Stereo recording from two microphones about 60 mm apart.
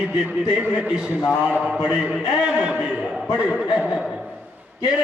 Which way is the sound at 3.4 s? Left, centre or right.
Centre.